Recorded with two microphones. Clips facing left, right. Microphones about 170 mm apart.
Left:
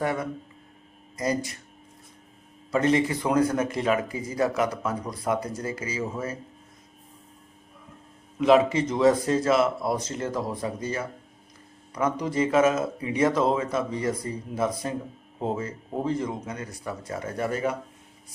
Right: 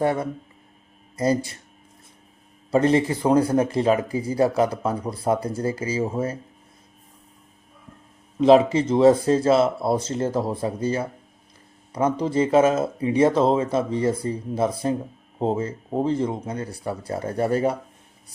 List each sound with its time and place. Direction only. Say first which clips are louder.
0.0 s speech: right 5 dB; 30° right (ahead or behind)
2.7 s speech: right 4 dB; 30° right (ahead or behind)
8.4 s speech: right 4 dB; 30° right (ahead or behind)